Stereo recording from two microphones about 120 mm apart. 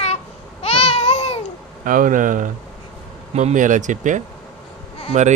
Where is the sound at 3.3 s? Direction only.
70° right (ahead or behind).